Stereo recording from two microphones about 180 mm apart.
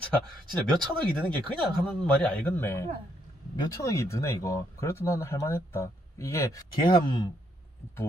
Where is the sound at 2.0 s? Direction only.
5° left (ahead or behind); by 7.3 s 25° left (ahead or behind).